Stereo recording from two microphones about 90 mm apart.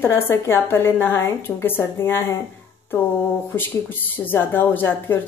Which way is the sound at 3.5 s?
25° left (ahead or behind).